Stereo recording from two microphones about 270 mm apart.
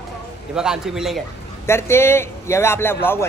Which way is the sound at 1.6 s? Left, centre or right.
Centre.